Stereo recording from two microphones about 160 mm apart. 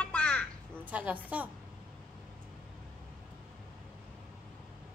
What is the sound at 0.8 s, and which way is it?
Speech, 10° right (ahead or behind).